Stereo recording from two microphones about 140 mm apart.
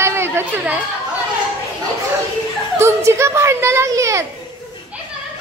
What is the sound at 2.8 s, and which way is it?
A woman's voice, 20° right (ahead or behind).